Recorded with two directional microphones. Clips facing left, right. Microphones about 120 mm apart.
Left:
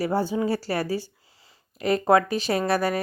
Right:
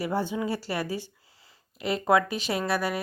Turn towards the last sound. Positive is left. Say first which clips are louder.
# left 4 dB
turn(degrees=40)  # may be behind; listen again after turning